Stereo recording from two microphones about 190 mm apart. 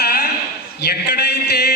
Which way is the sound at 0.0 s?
55° left (ahead or behind).